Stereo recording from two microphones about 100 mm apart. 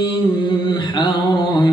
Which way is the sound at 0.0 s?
50° left (ahead or behind).